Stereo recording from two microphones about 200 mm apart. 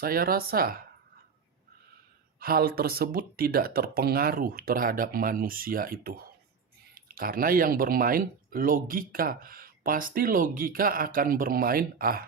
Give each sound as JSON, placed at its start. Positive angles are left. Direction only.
{"t": 0.0, "sound": "speech", "side_deg": -50}
{"t": 2.4, "sound": "speech", "side_deg": -50}